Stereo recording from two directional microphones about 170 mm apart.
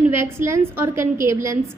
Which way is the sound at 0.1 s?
15° right (ahead or behind).